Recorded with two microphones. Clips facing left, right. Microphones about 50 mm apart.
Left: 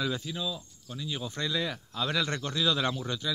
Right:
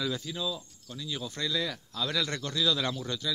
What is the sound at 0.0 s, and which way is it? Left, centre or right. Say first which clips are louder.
Speech: left 1 dB; centre.